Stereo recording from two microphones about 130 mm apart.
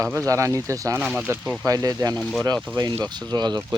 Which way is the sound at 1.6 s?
30° right (ahead or behind).